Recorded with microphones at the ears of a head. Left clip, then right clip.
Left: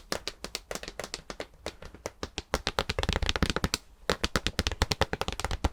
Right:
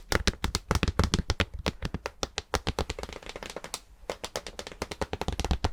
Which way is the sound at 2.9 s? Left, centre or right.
Left.